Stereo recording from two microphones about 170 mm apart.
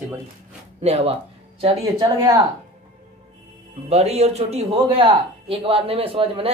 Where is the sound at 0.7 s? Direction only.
35° right (ahead or behind).